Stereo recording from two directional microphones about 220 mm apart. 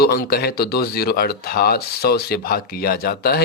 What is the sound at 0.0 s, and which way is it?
Speech, 45° left (ahead or behind).